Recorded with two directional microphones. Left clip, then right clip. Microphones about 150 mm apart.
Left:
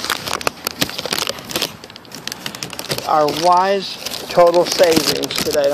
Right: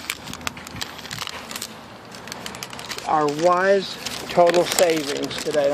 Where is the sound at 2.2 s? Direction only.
70° left (ahead or behind).